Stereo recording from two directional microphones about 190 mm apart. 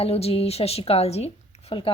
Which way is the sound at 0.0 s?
30° left (ahead or behind).